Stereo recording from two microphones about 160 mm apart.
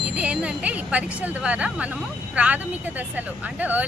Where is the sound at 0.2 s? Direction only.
10° right (ahead or behind).